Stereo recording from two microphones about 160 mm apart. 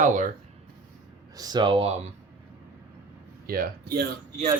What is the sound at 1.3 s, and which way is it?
Speech, 25° right (ahead or behind).